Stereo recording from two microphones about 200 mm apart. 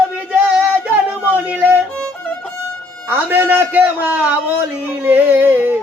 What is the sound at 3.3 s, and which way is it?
A man's voice, 10° right (ahead or behind).